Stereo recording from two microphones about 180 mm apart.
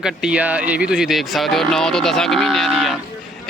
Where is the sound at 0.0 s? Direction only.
5° right (ahead or behind).